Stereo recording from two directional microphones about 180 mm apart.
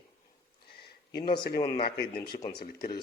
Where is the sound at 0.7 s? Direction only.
60° left (ahead or behind).